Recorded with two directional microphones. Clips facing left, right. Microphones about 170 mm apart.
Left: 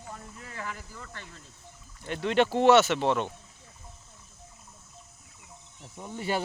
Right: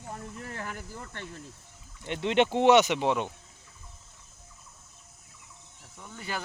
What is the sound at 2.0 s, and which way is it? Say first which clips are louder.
Speech: even; 20° right (ahead or behind).